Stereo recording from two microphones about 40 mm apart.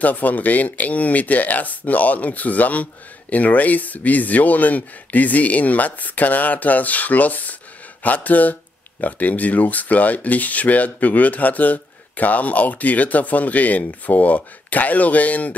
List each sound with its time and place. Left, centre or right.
0.0 s speech: left